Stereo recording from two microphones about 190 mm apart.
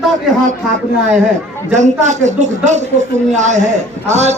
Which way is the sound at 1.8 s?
40° right (ahead or behind).